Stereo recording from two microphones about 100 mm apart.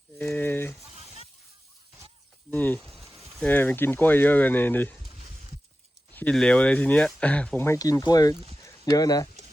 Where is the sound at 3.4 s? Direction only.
15° left (ahead or behind).